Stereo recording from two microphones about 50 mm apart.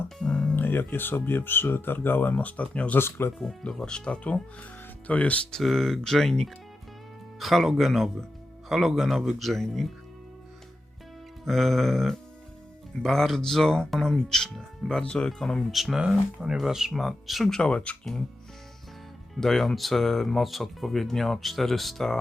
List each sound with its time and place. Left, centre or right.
0.2 s music: left
0.5 s speech: left
3.0 s speech: left
3.6 s speech: centre; by 5.4 s left
5.5 s speech: centre
11.4 s speech: centre
15.3 s speech: centre
17.5 s speech: centre
19.4 s speech: centre